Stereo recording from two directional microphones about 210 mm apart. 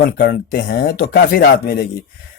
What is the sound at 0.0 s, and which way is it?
A man's voice, 45° left (ahead or behind).